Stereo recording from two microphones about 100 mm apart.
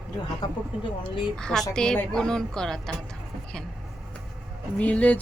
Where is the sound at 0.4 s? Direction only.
40° left (ahead or behind).